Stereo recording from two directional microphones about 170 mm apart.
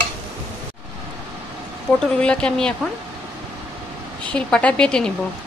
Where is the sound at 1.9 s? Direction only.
5° left (ahead or behind).